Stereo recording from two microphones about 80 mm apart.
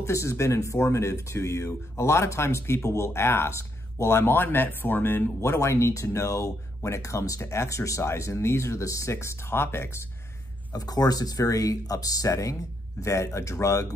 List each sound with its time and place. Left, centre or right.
0.0 s speech: left
10.7 s speech: left